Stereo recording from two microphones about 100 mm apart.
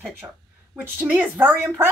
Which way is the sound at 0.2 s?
25° right (ahead or behind).